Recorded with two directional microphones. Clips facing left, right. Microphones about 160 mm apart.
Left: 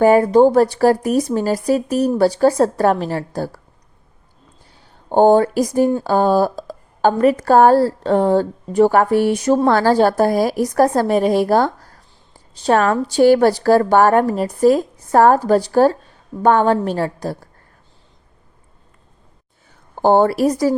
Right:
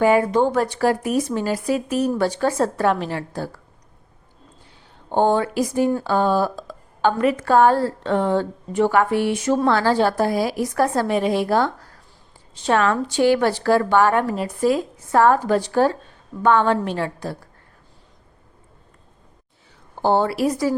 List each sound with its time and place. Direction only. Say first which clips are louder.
0.0 s a woman's voice: left 6 dB; 40° left (ahead or behind)
5.1 s a woman's voice: left 6 dB; 40° left (ahead or behind)
20.0 s a woman's voice: left 5 dB; 50° left (ahead or behind)